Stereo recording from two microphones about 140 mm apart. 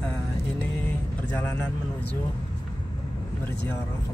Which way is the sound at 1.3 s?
15° left (ahead or behind).